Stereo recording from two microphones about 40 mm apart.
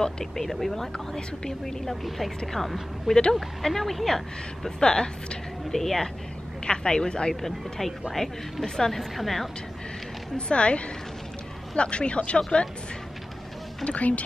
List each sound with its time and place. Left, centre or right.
0.0 s a woman's voice: centre
0.9 s a woman's voice: centre
2.0 s a woman's voice: centre
4.6 s a woman's voice: centre
5.7 s a woman's voice: centre
6.6 s speech: centre
7.4 s a woman's voice: centre
8.6 s a woman's voice: centre
9.1 s speech: centre
10.3 s speech: left
13.8 s speech: left